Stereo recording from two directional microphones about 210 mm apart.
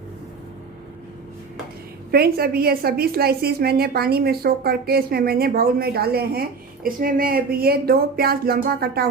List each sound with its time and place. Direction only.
2.1 s a woman's voice: 45° right (ahead or behind)